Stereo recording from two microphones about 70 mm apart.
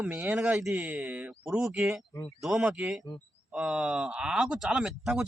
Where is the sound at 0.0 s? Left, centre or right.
Centre.